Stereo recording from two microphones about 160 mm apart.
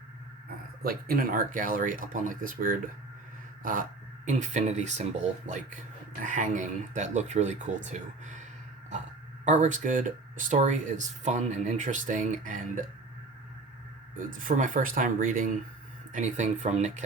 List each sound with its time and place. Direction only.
0.8 s speech: 65° right (ahead or behind)
3.6 s a sound: 60° right (ahead or behind)
4.3 s speech: 45° right (ahead or behind)
14.2 s speech: 55° right (ahead or behind)